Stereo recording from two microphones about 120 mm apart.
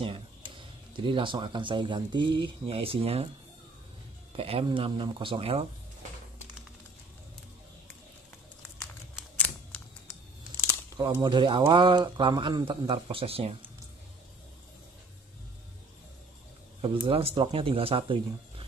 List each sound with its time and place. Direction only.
0.0 s speech: 45° right (ahead or behind)
4.3 s speech: 50° right (ahead or behind)
11.0 s speech: 40° right (ahead or behind); by 13.7 s 55° right (ahead or behind)
17.1 s speech: 50° right (ahead or behind)